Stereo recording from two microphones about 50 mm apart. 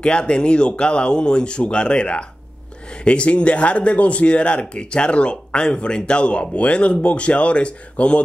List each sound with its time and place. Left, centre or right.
0.0 s speech: centre